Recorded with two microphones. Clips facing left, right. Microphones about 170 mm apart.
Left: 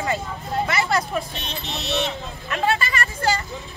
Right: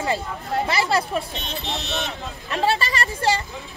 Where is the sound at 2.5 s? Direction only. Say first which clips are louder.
Right 1 dB; 30° right (ahead or behind).